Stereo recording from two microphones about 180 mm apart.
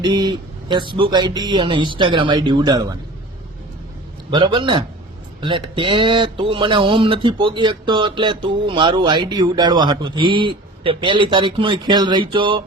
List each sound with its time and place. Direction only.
0.0 s speech: 25° right (ahead or behind)
4.3 s speech: 25° right (ahead or behind)